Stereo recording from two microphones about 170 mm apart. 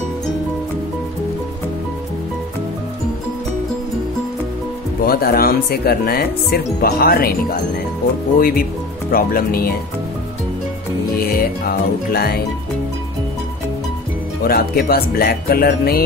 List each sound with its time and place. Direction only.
5.0 s speech: 60° left (ahead or behind)
8.4 s speech: 60° left (ahead or behind)
11.1 s music: 60° left (ahead or behind)
14.4 s speech: 60° left (ahead or behind)